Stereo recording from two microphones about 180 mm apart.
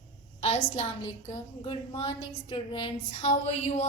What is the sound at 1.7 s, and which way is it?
A woman's voice, 25° left (ahead or behind).